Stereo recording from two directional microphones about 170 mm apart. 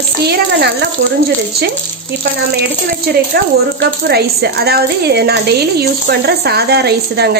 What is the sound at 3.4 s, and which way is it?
A woman's voice, 70° right (ahead or behind).